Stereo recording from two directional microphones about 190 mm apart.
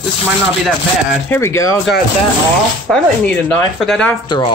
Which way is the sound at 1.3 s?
15° left (ahead or behind).